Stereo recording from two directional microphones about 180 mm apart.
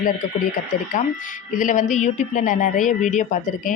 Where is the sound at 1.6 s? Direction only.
45° left (ahead or behind).